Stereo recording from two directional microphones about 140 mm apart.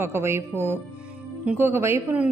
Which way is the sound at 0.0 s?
15° right (ahead or behind).